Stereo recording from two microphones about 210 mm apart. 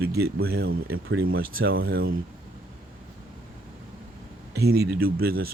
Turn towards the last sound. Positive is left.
turn(degrees=-45)  # may be behind; listen again after turning